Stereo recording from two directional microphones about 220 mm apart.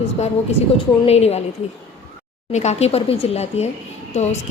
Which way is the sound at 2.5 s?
30° left (ahead or behind).